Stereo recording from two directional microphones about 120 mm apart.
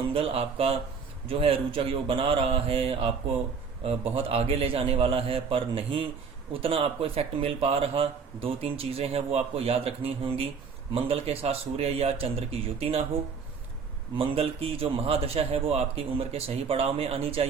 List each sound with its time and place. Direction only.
0.1 s speech: 50° right (ahead or behind)
4.1 s a man's voice: 55° right (ahead or behind)
14.2 s a man's voice: 55° right (ahead or behind)